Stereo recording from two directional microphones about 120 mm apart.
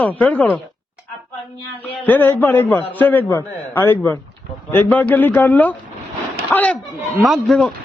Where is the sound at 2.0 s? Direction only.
15° left (ahead or behind).